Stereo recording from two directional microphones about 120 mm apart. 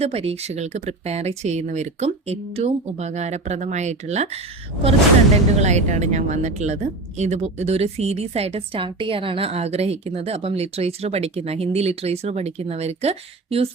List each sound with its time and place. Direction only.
0.0 s speech: 55° right (ahead or behind)
5.5 s a woman's voice: 70° right (ahead or behind)